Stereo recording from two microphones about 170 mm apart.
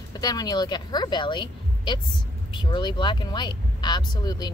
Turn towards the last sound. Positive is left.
turn(degrees=25)  # may be behind; listen again after turning